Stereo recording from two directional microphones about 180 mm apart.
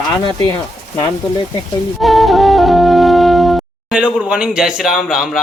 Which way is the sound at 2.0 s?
Centre (ahead or behind).